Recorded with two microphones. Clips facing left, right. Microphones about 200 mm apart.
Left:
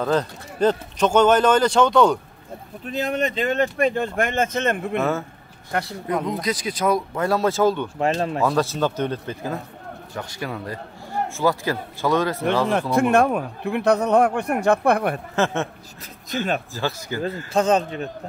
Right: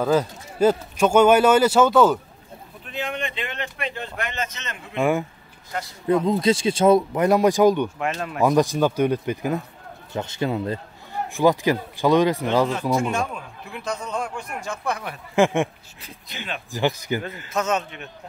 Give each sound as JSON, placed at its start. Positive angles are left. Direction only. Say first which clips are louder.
{"t": 0.0, "sound": "speech", "louder": "right 1 dB", "side_deg": -10}
{"t": 2.8, "sound": "speech", "louder": "left 6 dB", "side_deg": 40}
{"t": 4.9, "sound": "speech", "louder": "right 6 dB", "side_deg": -15}
{"t": 5.7, "sound": "speech", "louder": "left 5 dB", "side_deg": 65}
{"t": 6.0, "sound": "speech", "louder": "right 8 dB", "side_deg": -25}
{"t": 8.0, "sound": "speech", "louder": "left 5 dB", "side_deg": 30}
{"t": 8.4, "sound": "speech", "louder": "right 8 dB", "side_deg": -15}
{"t": 12.9, "sound": "speech", "louder": "left 6 dB", "side_deg": 60}
{"t": 15.3, "sound": "speech", "louder": "right 7 dB", "side_deg": -15}
{"t": 16.7, "sound": "speech", "louder": "right 4 dB", "side_deg": -15}
{"t": 17.5, "sound": "speech", "louder": "left 5 dB", "side_deg": 30}